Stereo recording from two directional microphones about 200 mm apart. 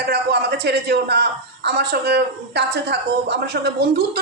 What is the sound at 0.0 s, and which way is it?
A man's voice, 55° right (ahead or behind).